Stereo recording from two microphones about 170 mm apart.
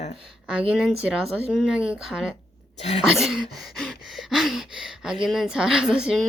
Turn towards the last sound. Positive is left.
turn(degrees=-5)  # may be behind; listen again after turning